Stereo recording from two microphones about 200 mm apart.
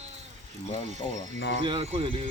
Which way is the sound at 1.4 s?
60° left (ahead or behind).